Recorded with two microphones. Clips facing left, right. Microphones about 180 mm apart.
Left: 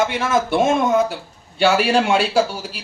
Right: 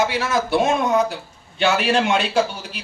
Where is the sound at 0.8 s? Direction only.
Centre (ahead or behind).